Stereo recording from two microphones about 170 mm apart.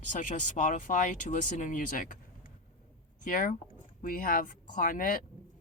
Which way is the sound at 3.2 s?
55° left (ahead or behind).